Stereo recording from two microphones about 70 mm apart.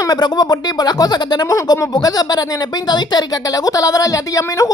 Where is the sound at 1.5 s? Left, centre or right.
Left.